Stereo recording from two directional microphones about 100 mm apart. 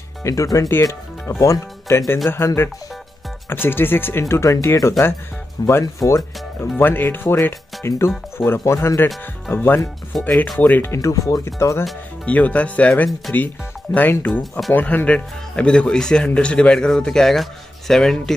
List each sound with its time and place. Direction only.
0.2 s speech: 35° left (ahead or behind)
6.8 s speech: 20° left (ahead or behind)
10.3 s speech: 5° left (ahead or behind)
10.6 s speech: 20° left (ahead or behind)
11.0 s speech: 35° left (ahead or behind)
12.3 s speech: 15° left (ahead or behind)